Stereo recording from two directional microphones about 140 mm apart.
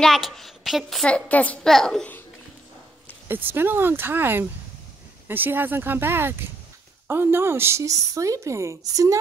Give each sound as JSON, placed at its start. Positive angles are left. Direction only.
{"t": 0.0, "sound": "a woman's voice", "side_deg": 0}
{"t": 3.3, "sound": "a woman's voice", "side_deg": -15}